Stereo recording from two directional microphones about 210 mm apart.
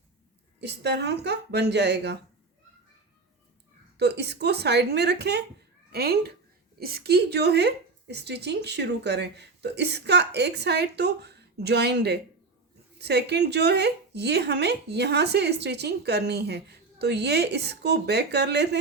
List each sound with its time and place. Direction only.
0.6 s speech: 55° right (ahead or behind)
3.9 s speech: 50° right (ahead or behind)